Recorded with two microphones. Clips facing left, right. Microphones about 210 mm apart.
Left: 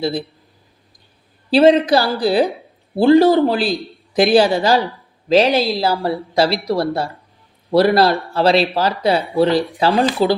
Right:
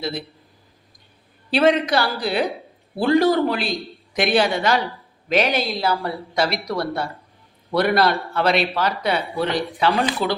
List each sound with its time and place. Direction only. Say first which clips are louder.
0.0 s speech: left 7 dB; 30° left (ahead or behind)
1.5 s speech: left 6 dB; 30° left (ahead or behind)